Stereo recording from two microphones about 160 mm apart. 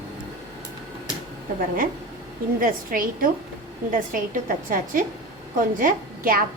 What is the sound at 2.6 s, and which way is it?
A woman's voice, 60° right (ahead or behind).